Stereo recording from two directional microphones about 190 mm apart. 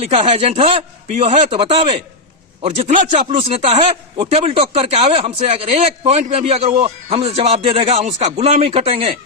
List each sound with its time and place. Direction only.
0.0 s a man's voice: 35° right (ahead or behind)